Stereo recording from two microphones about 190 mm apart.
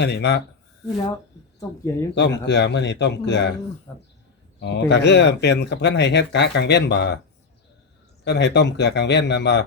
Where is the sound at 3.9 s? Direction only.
10° left (ahead or behind).